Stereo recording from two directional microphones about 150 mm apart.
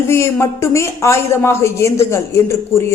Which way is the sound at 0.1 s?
15° left (ahead or behind).